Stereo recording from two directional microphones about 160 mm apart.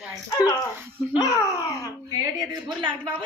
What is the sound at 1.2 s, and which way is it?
Speech, 20° left (ahead or behind).